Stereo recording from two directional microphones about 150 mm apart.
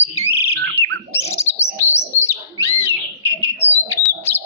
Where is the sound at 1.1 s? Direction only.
15° left (ahead or behind).